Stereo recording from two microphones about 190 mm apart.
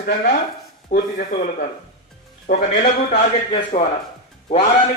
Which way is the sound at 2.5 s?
45° left (ahead or behind).